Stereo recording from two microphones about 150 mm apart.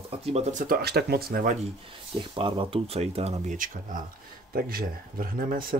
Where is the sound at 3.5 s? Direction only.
65° right (ahead or behind).